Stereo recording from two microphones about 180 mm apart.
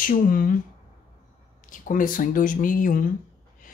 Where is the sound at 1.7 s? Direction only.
50° left (ahead or behind).